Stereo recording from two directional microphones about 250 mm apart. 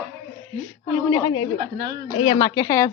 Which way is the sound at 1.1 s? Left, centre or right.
Centre.